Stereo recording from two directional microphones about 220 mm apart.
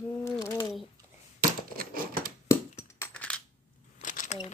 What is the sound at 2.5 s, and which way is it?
Crushing, 10° left (ahead or behind).